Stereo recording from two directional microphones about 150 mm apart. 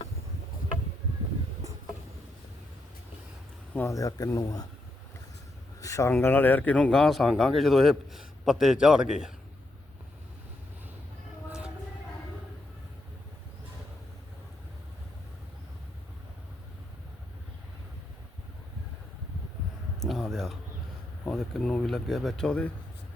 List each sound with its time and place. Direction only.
3.8 s speech: 20° left (ahead or behind)
5.8 s speech: 20° left (ahead or behind); by 9.3 s 5° right (ahead or behind)
20.0 s a sound: centre (ahead or behind)
21.2 s speech: 5° left (ahead or behind)